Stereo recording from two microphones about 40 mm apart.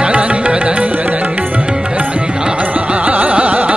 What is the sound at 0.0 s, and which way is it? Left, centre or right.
Music, right.